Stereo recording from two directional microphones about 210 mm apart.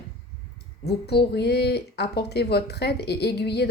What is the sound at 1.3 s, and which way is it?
Speech, 50° left (ahead or behind).